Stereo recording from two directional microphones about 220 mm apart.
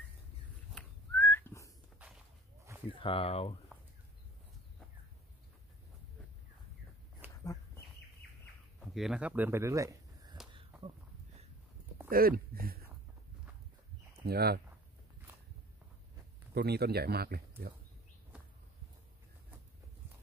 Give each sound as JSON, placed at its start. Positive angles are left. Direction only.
{"t": 0.7, "sound": "whistling", "side_deg": 10}
{"t": 2.9, "sound": "speech", "side_deg": 25}
{"t": 8.2, "sound": "bird", "side_deg": 50}
{"t": 8.9, "sound": "speech", "side_deg": 0}
{"t": 12.1, "sound": "speech", "side_deg": -40}
{"t": 14.2, "sound": "speech", "side_deg": -45}
{"t": 16.5, "sound": "speech", "side_deg": -45}